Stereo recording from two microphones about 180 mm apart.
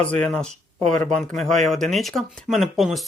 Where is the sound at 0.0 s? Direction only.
5° left (ahead or behind).